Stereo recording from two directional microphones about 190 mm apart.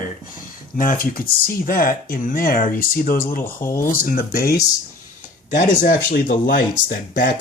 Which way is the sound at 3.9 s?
50° left (ahead or behind).